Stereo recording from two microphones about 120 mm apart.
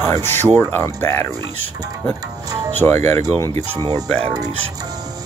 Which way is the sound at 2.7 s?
20° left (ahead or behind).